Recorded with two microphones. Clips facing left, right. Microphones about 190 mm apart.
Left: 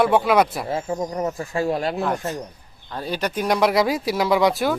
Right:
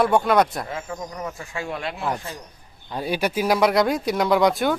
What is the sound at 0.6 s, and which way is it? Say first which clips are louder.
Speech: left 7 dB; 30° left (ahead or behind).